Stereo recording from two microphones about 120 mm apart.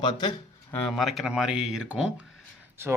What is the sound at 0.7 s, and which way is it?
Speech, 5° left (ahead or behind).